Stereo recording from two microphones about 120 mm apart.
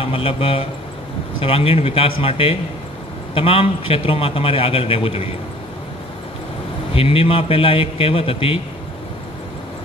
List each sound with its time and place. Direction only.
0.0 s a man's voice: 50° left (ahead or behind)
6.9 s a man's voice: 50° left (ahead or behind)